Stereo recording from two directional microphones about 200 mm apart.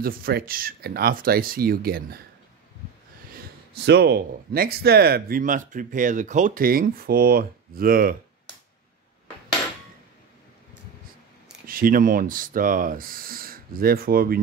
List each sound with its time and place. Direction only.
0.0 s speech: 45° right (ahead or behind)
3.7 s speech: 55° right (ahead or behind)
11.6 s speech: 45° right (ahead or behind)